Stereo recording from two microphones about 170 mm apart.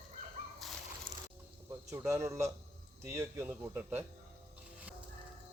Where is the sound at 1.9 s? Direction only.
15° right (ahead or behind).